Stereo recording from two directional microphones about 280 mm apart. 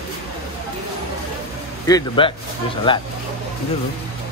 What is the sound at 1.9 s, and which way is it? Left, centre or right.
A man's voice, centre.